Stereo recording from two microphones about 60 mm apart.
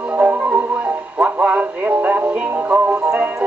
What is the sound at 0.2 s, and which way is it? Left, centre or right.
Music, right.